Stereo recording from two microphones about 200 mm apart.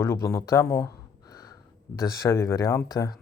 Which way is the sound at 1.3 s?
20° left (ahead or behind).